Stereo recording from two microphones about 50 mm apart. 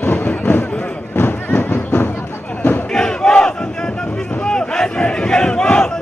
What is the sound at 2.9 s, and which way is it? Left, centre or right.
Crowd, centre.